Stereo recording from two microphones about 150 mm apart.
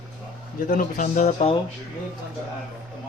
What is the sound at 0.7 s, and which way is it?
Speech, 65° left (ahead or behind).